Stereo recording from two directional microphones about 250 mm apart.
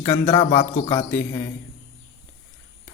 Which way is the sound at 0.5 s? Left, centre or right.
Left.